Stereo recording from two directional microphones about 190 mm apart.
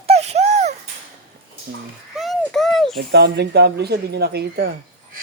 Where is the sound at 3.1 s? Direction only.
60° right (ahead or behind).